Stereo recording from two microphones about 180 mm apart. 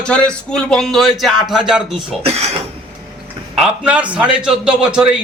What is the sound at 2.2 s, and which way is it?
Speech, 35° right (ahead or behind).